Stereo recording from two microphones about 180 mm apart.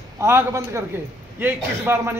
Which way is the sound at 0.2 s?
15° right (ahead or behind).